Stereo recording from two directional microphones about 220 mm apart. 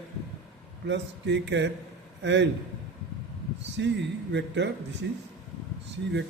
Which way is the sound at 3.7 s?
55° right (ahead or behind).